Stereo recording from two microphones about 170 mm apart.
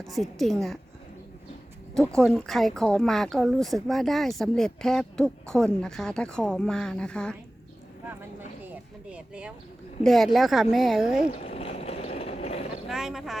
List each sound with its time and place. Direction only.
0.0 s speech: centre (ahead or behind)
2.1 s speech: centre (ahead or behind)
8.2 s vehicle: 10° right (ahead or behind)
10.0 s speech: centre (ahead or behind)
11.3 s a sound: 40° left (ahead or behind)
12.9 s speech: centre (ahead or behind)